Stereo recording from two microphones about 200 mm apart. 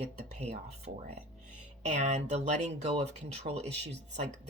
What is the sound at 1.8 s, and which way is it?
Speech, 35° right (ahead or behind).